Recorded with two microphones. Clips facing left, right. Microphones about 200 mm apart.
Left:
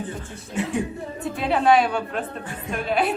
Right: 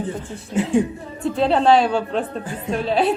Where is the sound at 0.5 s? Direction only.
30° right (ahead or behind).